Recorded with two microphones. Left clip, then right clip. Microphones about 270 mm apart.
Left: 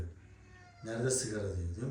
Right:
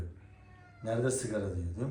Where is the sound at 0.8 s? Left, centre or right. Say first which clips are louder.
Right 3 dB; centre.